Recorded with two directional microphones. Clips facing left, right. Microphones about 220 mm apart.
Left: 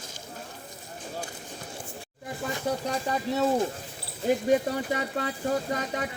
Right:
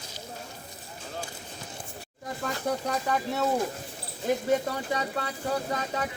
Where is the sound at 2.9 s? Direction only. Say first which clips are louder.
Even; 30° left (ahead or behind).